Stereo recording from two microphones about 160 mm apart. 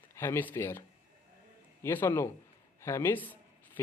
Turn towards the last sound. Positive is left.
turn(degrees=10)  # may be behind; listen again after turning